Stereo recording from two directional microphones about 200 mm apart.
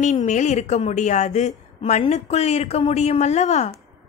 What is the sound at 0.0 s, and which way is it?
A woman's voice, 35° left (ahead or behind).